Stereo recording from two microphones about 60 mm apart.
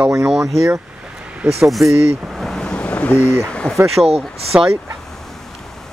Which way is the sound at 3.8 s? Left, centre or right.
Centre.